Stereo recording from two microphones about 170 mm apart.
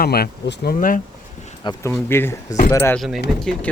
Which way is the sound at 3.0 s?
Centre (ahead or behind).